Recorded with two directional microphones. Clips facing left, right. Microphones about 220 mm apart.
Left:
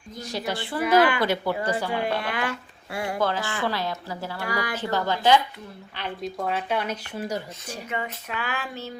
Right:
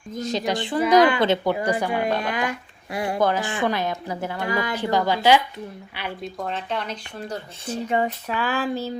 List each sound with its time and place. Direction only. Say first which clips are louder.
0.2 s speech: right 5 dB; 20° right (ahead or behind)
6.5 s speech: left 3 dB; 10° left (ahead or behind)
7.9 s a sound: right 8 dB; 35° right (ahead or behind)